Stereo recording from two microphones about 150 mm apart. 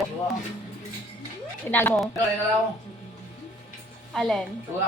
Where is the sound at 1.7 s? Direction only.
15° left (ahead or behind).